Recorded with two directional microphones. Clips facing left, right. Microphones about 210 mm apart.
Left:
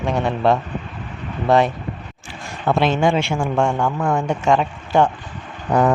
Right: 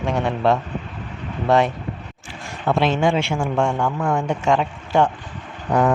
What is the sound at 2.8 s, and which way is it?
Speech, 45° left (ahead or behind).